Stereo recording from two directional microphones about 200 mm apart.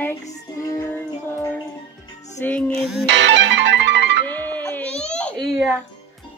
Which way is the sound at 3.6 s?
60° right (ahead or behind).